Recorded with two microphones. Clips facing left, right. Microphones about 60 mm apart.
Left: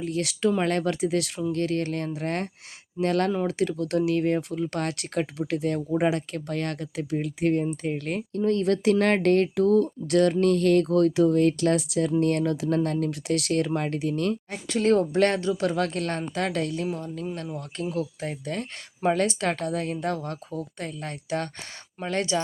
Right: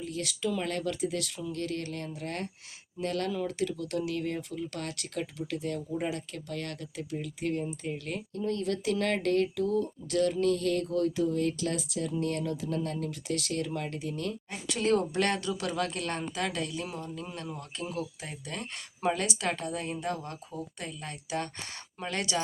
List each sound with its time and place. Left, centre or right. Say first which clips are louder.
0.0 s speech: left 8 dB; left